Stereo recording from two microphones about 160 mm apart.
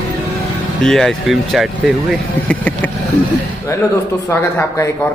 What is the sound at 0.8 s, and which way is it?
Speech, centre (ahead or behind).